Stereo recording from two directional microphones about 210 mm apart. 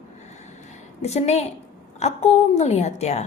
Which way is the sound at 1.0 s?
30° left (ahead or behind).